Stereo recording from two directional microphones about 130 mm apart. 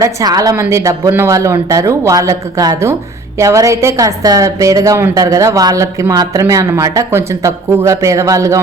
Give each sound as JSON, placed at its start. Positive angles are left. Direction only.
{"t": 0.0, "sound": "a woman's voice", "side_deg": -25}